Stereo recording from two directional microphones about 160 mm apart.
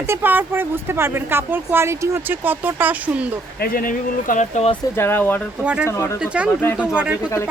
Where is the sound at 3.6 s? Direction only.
60° left (ahead or behind).